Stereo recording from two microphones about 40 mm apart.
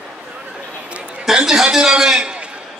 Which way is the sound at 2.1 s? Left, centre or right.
Right.